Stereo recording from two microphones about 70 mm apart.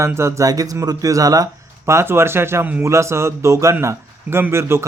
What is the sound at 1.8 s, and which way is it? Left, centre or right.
A man's voice, right.